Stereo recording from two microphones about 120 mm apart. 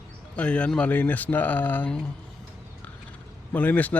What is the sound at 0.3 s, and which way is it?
Speech, 10° left (ahead or behind).